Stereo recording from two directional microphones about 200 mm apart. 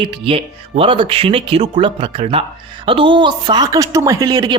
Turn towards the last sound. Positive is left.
turn(degrees=-20)  # may be behind; listen again after turning